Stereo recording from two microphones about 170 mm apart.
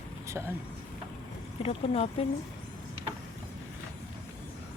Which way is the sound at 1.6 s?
35° left (ahead or behind).